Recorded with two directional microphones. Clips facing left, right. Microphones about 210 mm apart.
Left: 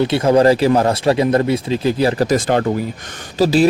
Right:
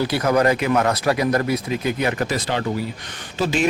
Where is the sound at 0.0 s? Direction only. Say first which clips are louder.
Left 6 dB; 25° left (ahead or behind); by 2.6 s 45° left (ahead or behind).